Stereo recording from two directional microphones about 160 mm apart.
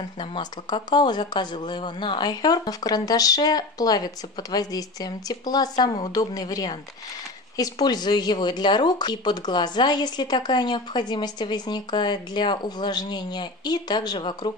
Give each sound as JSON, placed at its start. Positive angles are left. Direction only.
{"t": 0.2, "sound": "speech", "side_deg": 30}